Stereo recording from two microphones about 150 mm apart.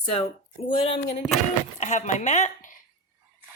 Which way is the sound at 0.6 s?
40° left (ahead or behind).